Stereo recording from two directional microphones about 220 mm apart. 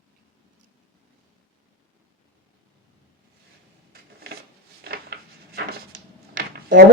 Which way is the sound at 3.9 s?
45° right (ahead or behind).